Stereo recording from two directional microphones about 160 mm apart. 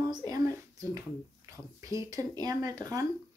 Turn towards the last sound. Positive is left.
turn(degrees=-25)  # may be behind; listen again after turning